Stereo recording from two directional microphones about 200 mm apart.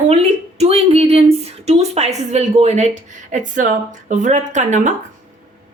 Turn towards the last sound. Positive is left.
turn(degrees=-35)  # may be behind; listen again after turning